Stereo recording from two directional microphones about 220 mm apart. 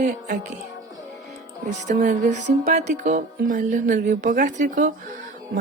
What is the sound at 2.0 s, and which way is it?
Speech, 35° right (ahead or behind).